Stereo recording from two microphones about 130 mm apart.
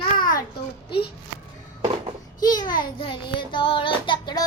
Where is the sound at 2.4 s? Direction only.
30° left (ahead or behind).